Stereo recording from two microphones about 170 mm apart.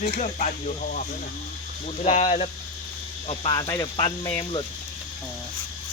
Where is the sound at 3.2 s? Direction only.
30° left (ahead or behind).